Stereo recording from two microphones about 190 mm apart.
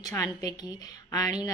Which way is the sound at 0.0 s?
15° left (ahead or behind).